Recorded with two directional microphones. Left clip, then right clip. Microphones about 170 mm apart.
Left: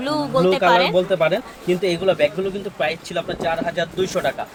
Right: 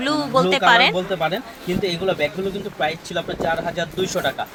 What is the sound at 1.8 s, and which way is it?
Speech, 30° left (ahead or behind).